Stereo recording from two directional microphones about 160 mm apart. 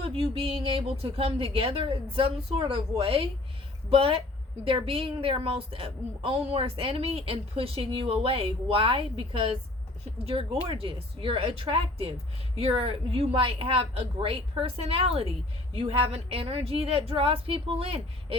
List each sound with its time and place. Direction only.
0.0 s a woman's voice: 35° right (ahead or behind)